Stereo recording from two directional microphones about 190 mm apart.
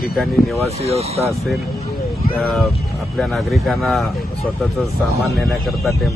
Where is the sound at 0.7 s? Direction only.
35° right (ahead or behind).